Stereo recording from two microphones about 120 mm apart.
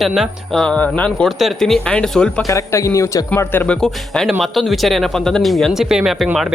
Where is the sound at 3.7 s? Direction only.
5° left (ahead or behind).